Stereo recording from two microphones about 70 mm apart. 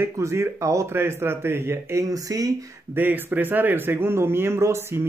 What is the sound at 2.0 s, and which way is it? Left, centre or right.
Speech, right.